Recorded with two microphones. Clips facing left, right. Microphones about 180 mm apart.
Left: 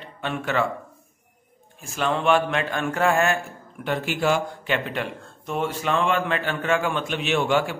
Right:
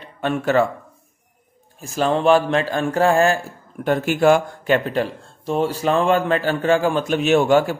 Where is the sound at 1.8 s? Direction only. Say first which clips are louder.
Right 5 dB; 35° right (ahead or behind).